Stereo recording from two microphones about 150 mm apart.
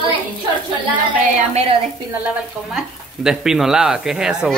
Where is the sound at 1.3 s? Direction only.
45° right (ahead or behind).